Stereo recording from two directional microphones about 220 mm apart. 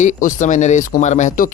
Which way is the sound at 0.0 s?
35° left (ahead or behind).